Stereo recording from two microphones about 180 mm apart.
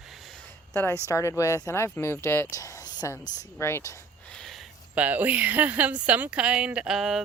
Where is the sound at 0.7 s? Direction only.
10° left (ahead or behind).